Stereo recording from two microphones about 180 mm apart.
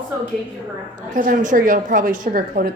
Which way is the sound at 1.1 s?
45° right (ahead or behind).